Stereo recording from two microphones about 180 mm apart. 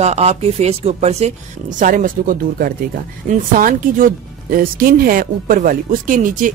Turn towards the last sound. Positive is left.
turn(degrees=-45)  # may be behind; listen again after turning